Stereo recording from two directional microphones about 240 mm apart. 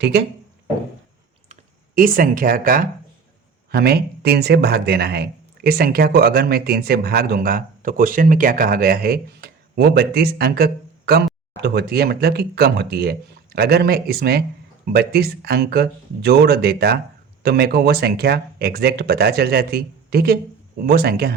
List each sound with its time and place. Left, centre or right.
0.0 s speech: right
2.0 s speech: right